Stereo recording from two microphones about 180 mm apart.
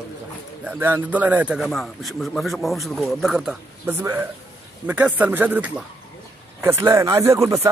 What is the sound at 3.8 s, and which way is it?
Speech, 15° right (ahead or behind).